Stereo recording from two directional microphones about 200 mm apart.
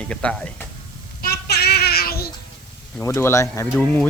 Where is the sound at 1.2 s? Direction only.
50° left (ahead or behind).